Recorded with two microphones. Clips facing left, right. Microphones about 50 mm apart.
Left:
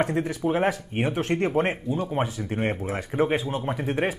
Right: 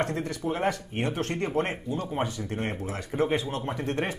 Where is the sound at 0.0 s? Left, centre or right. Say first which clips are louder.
Left 5 dB; centre.